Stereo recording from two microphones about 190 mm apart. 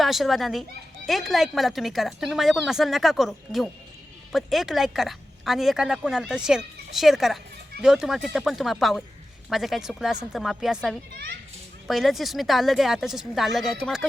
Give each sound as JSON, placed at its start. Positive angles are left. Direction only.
{"t": 0.0, "sound": "speech", "side_deg": 0}
{"t": 11.1, "sound": "a child's voice", "side_deg": -55}
{"t": 11.9, "sound": "speech", "side_deg": 0}